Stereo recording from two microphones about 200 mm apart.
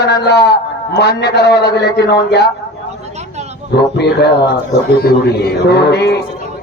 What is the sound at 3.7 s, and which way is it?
A man's voice, 55° left (ahead or behind).